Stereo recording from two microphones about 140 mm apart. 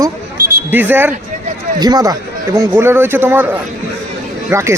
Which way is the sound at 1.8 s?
30° right (ahead or behind).